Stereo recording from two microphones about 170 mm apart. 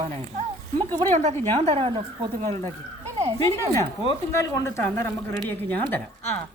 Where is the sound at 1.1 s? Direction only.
40° right (ahead or behind).